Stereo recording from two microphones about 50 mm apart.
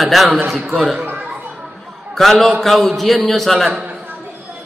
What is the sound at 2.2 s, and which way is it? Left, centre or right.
A man's voice, centre.